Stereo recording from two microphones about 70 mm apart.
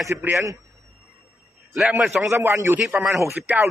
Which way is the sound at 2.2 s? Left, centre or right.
Right.